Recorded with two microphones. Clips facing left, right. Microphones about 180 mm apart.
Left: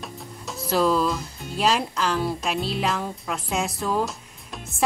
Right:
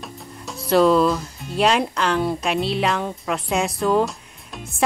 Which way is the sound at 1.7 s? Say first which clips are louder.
Right 2 dB; centre (ahead or behind).